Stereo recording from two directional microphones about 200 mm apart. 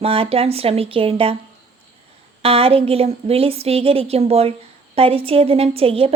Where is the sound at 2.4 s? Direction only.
30° right (ahead or behind).